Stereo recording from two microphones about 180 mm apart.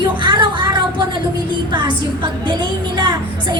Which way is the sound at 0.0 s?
25° right (ahead or behind).